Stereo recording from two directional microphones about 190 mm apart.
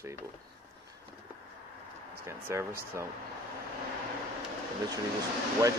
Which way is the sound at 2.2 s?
15° right (ahead or behind).